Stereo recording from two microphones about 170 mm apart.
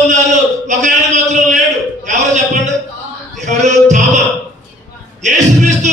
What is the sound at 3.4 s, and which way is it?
Music, 45° right (ahead or behind).